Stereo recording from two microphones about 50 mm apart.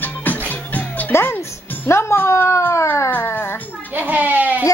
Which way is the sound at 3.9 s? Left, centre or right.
Right.